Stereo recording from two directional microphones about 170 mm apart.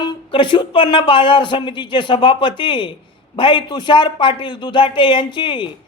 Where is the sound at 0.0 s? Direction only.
30° left (ahead or behind).